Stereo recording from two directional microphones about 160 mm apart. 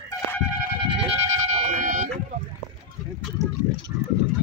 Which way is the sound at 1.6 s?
55° right (ahead or behind).